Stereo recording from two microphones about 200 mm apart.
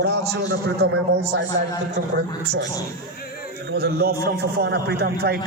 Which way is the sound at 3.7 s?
50° right (ahead or behind).